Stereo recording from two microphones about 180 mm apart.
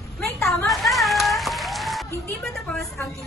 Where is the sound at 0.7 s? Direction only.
Centre (ahead or behind).